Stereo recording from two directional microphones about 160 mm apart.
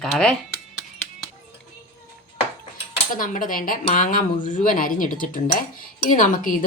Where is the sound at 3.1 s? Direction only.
55° left (ahead or behind).